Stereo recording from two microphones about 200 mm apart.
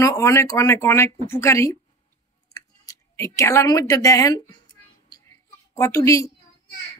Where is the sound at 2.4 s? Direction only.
15° left (ahead or behind).